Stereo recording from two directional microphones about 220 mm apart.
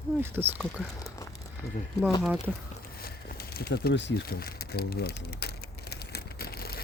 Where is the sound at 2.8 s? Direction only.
45° left (ahead or behind).